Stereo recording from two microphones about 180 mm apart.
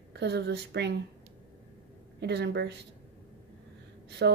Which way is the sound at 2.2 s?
70° right (ahead or behind).